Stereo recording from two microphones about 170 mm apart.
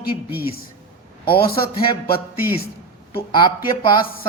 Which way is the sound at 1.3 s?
65° left (ahead or behind).